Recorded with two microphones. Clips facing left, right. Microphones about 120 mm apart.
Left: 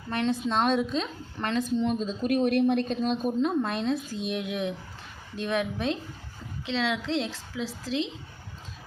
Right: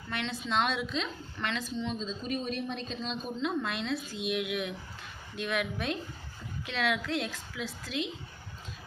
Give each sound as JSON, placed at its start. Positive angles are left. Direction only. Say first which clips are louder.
{"t": 0.1, "sound": "a woman's voice", "louder": "left 6 dB", "side_deg": 40}
{"t": 1.8, "sound": "a woman's voice", "louder": "left 8 dB", "side_deg": 55}